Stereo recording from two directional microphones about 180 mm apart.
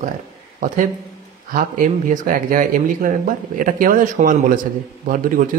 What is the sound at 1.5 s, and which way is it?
Speech, 45° right (ahead or behind).